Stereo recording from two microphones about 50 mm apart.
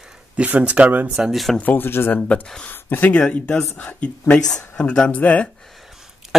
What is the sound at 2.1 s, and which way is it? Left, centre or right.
Speech, left.